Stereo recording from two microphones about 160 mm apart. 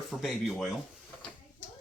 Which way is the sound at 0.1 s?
Centre (ahead or behind).